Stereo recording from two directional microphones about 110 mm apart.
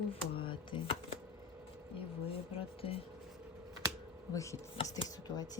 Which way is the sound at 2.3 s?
60° left (ahead or behind).